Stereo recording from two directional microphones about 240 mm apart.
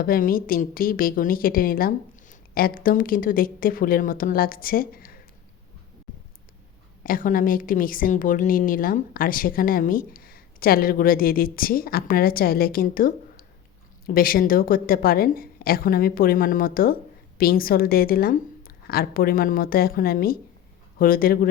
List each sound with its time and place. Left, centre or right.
0.0 s a woman's voice: left
7.0 s a woman's voice: left